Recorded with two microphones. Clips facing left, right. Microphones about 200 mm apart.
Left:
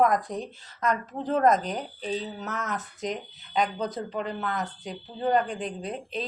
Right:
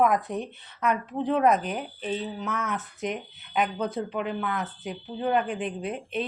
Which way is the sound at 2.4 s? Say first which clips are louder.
Right 2 dB; 40° left (ahead or behind).